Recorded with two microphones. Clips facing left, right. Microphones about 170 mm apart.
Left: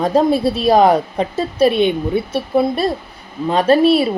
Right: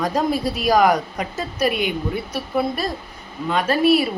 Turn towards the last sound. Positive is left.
turn(degrees=25)  # may be behind; listen again after turning